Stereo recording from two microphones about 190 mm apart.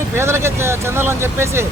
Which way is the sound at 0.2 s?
15° right (ahead or behind).